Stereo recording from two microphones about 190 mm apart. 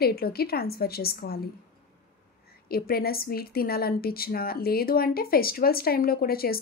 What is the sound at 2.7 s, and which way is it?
A woman's voice, 55° left (ahead or behind).